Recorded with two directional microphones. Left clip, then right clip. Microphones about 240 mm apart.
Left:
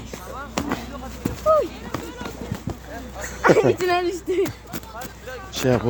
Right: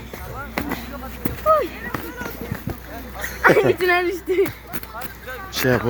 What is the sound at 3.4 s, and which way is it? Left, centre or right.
A woman's voice, left.